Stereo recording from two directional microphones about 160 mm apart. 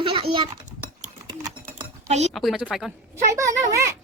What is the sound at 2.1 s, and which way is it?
Speech, 45° right (ahead or behind).